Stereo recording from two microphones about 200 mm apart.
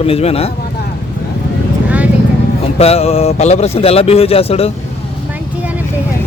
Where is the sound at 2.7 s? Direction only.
30° left (ahead or behind).